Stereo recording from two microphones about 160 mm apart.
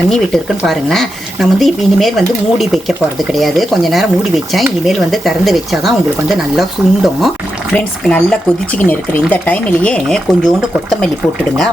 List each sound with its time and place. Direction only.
0.6 s speech: centre (ahead or behind)